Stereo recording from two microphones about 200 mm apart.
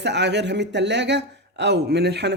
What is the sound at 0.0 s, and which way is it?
Speech, 60° right (ahead or behind).